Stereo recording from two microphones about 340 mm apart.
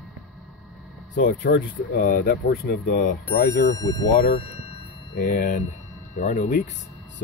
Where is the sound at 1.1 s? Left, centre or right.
Left.